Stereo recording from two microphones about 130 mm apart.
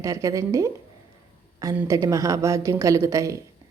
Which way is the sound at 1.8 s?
25° right (ahead or behind).